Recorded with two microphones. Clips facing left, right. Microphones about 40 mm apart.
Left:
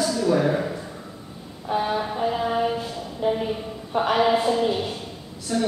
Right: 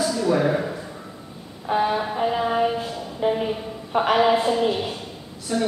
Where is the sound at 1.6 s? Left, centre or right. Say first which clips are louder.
Right 2 dB; centre.